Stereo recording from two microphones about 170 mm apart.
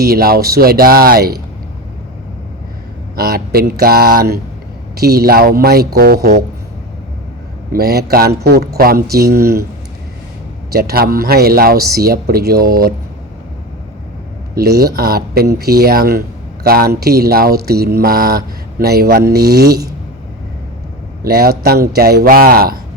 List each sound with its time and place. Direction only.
0.0 s speech: 65° right (ahead or behind)
3.2 s speech: 65° right (ahead or behind)
7.7 s a man's voice: 65° right (ahead or behind)
10.7 s speech: 65° right (ahead or behind)
14.5 s speech: 65° right (ahead or behind)
21.2 s speech: 60° right (ahead or behind)